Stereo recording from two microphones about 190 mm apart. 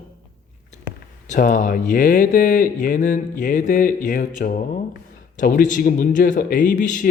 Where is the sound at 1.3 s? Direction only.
45° left (ahead or behind).